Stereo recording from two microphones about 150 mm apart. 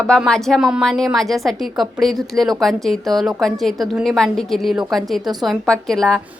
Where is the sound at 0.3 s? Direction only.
Centre (ahead or behind).